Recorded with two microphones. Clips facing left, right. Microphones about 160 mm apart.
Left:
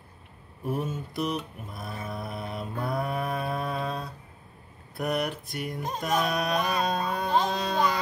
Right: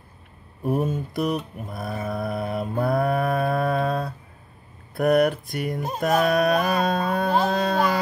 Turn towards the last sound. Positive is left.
turn(degrees=-55)  # may be behind; listen again after turning